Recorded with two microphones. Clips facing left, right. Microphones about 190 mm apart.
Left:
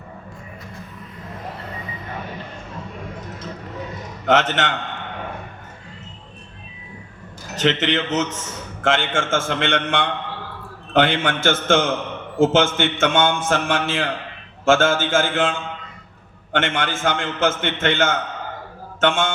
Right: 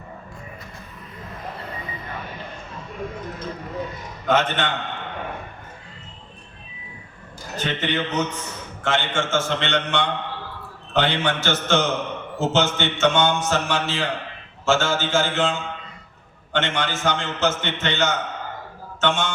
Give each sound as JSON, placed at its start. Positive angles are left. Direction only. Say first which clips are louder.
{"t": 4.3, "sound": "a man's voice", "louder": "left 2 dB", "side_deg": 80}
{"t": 7.5, "sound": "a man's voice", "louder": "left 5 dB", "side_deg": 80}
{"t": 9.0, "sound": "a man's voice", "louder": "left 1 dB", "side_deg": 50}